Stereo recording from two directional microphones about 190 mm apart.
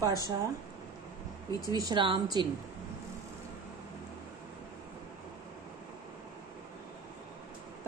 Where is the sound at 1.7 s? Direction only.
25° right (ahead or behind).